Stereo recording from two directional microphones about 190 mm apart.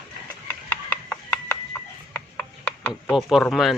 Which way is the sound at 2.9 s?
Centre (ahead or behind).